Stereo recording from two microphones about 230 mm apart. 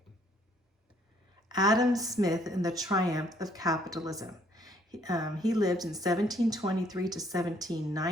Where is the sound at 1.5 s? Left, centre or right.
Centre.